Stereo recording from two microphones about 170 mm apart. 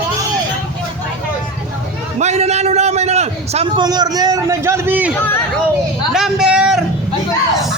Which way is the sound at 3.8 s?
25° right (ahead or behind).